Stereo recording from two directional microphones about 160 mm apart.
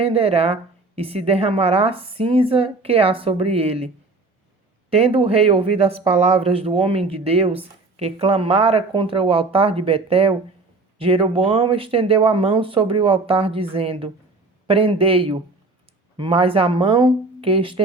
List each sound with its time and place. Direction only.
0.0 s speech: 35° right (ahead or behind)